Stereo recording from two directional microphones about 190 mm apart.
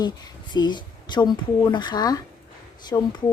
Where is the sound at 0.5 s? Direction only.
25° left (ahead or behind).